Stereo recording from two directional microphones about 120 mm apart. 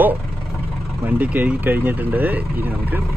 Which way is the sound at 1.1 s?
15° right (ahead or behind).